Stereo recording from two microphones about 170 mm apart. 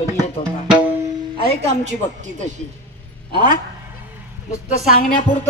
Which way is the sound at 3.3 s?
30° right (ahead or behind).